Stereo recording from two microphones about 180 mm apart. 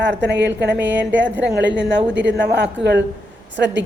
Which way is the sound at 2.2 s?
70° right (ahead or behind).